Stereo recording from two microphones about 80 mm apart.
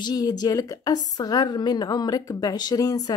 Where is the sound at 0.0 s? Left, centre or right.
Left.